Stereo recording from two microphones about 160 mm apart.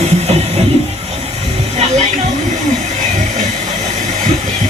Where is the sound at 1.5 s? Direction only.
40° right (ahead or behind).